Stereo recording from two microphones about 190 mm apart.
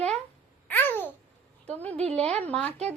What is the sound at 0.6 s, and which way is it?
Babbling, 10° left (ahead or behind).